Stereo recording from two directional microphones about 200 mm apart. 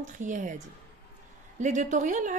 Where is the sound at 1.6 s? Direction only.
40° right (ahead or behind).